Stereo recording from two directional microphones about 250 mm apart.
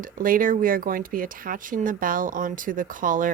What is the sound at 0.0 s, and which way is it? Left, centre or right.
Speech, right.